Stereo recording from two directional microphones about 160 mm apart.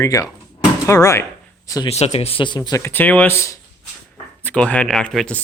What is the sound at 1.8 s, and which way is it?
Speech, 40° left (ahead or behind).